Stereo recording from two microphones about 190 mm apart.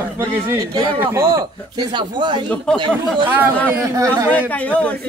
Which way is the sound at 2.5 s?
5° left (ahead or behind).